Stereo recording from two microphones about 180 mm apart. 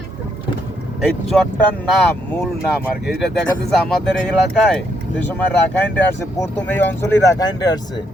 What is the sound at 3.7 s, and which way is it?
Speech, centre (ahead or behind).